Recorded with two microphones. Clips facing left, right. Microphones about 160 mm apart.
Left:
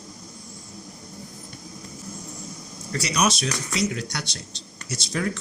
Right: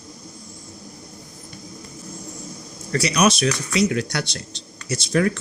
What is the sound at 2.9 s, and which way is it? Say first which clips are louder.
Speech: right 5 dB; 65° right (ahead or behind).